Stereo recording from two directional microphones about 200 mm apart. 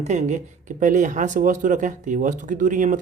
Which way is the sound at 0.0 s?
35° right (ahead or behind).